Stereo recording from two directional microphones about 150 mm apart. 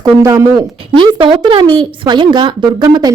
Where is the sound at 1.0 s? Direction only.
35° right (ahead or behind).